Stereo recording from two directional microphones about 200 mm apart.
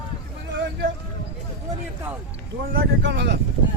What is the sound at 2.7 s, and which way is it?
Speech, 55° right (ahead or behind).